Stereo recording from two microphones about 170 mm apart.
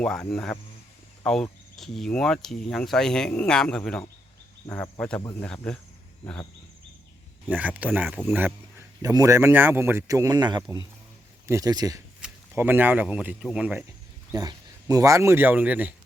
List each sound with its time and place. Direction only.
0.0 s speech: 5° left (ahead or behind)
7.4 s speech: 10° right (ahead or behind)
9.0 s speech: 20° right (ahead or behind)
12.2 s speech: 10° right (ahead or behind)
14.3 s speech: 20° right (ahead or behind)